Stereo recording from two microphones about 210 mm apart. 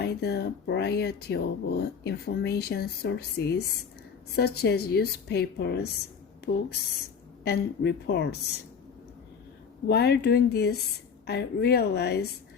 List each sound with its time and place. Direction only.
0.0 s speech: 50° left (ahead or behind)
9.8 s speech: 50° left (ahead or behind)